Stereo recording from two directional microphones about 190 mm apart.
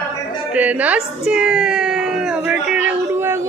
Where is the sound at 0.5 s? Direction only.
10° right (ahead or behind).